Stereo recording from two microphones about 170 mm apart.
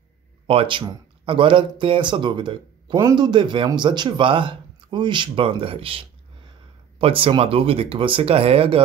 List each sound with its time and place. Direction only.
0.5 s speech: 30° right (ahead or behind)